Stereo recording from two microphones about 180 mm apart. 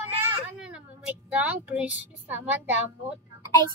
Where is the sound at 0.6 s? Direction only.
5° right (ahead or behind).